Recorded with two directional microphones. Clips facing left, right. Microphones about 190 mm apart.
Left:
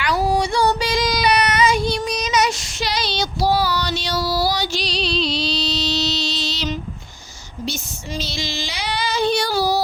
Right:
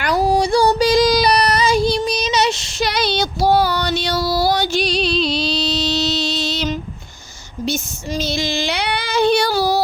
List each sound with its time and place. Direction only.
0.0 s female singing: 40° right (ahead or behind)
0.7 s child singing: 35° right (ahead or behind)
2.8 s female singing: 55° right (ahead or behind)